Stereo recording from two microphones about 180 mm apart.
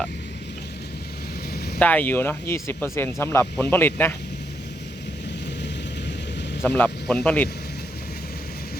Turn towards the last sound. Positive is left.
turn(degrees=5)  # may be behind; listen again after turning